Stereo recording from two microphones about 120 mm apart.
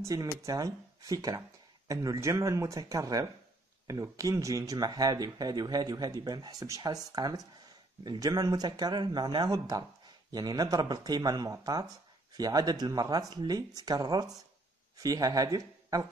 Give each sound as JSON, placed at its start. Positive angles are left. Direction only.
{"t": 0.0, "sound": "speech", "side_deg": -30}